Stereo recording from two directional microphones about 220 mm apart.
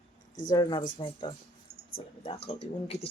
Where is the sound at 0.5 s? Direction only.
20° left (ahead or behind).